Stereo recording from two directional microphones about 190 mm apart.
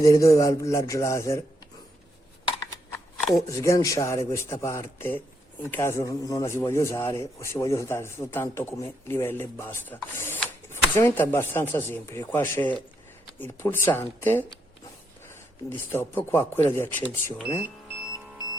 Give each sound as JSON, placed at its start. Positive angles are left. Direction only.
{"t": 0.0, "sound": "a man's voice", "side_deg": 15}
{"t": 3.5, "sound": "a man's voice", "side_deg": 15}
{"t": 15.9, "sound": "a man's voice", "side_deg": 15}